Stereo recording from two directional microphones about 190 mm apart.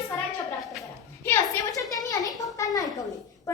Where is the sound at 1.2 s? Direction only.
15° left (ahead or behind).